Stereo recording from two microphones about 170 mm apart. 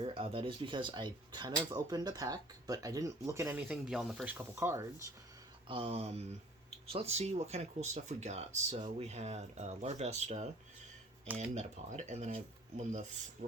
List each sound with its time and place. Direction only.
0.0 s speech: 30° right (ahead or behind); by 5.1 s 15° right (ahead or behind)
5.6 s speech: 35° right (ahead or behind)
11.5 s speech: 45° right (ahead or behind)